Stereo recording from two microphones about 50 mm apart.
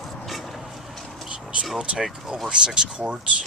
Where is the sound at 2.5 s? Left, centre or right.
Centre.